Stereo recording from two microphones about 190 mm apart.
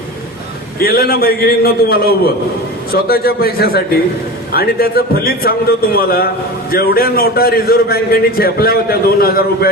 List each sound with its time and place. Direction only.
0.8 s a man's voice: 55° left (ahead or behind)